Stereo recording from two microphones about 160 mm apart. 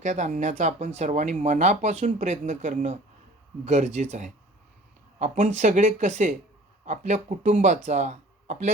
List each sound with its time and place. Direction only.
0.0 s speech: 50° right (ahead or behind)